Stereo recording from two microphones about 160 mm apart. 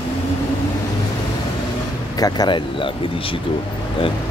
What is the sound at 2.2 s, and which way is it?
Speech, 25° left (ahead or behind).